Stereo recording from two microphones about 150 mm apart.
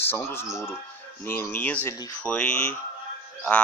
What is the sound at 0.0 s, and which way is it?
Speech, 15° left (ahead or behind).